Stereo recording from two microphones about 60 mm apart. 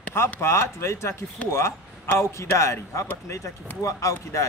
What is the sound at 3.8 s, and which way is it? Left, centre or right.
Speech, left.